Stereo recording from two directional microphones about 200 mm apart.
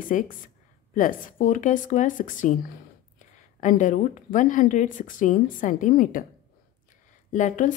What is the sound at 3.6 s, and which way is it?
Speech, 40° left (ahead or behind).